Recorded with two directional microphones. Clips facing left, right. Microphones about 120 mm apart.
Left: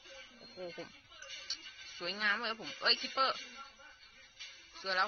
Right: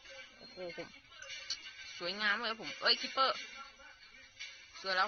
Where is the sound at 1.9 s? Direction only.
Centre (ahead or behind).